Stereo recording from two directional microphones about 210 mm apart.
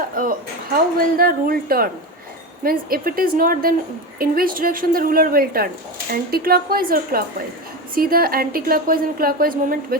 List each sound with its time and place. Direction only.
0.2 s speech: 40° right (ahead or behind)